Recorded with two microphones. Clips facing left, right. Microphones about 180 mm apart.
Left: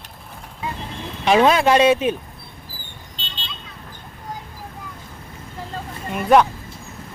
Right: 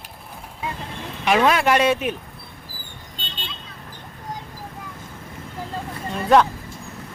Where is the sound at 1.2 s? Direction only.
30° left (ahead or behind).